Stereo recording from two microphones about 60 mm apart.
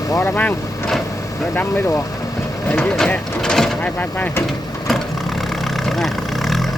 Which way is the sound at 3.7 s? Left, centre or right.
Left.